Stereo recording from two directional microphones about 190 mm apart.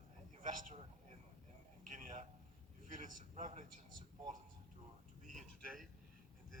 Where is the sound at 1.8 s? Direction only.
45° right (ahead or behind).